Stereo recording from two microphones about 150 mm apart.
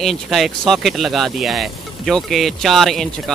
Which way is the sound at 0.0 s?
Centre (ahead or behind).